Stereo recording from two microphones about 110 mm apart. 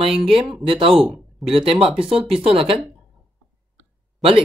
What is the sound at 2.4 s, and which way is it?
Speech, 55° right (ahead or behind).